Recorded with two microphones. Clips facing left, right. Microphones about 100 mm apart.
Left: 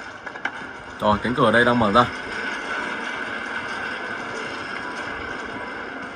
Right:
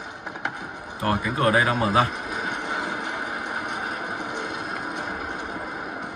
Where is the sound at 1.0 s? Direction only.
25° left (ahead or behind).